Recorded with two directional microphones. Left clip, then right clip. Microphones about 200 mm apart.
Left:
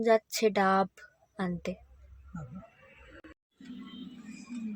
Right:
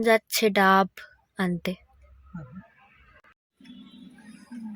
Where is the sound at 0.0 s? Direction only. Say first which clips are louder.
Right 4 dB; 20° right (ahead or behind).